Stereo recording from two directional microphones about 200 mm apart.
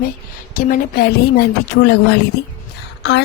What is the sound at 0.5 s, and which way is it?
A woman's voice, 45° left (ahead or behind).